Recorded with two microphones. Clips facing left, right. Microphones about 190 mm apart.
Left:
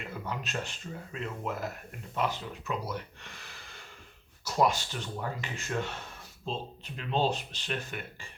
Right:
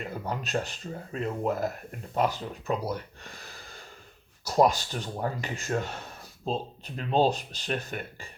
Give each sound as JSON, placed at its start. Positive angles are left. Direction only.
{"t": 0.1, "sound": "speech", "side_deg": -35}